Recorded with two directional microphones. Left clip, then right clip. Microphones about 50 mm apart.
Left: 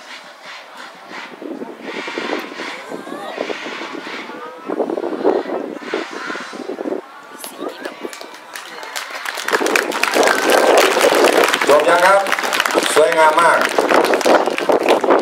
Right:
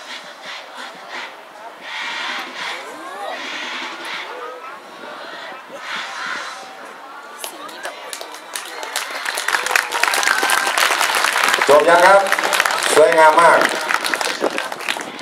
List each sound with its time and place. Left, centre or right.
1.9 s vehicle: centre
5.4 s vehicle: centre
9.5 s applause: left